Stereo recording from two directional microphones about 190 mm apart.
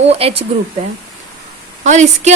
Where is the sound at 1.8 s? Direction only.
40° right (ahead or behind).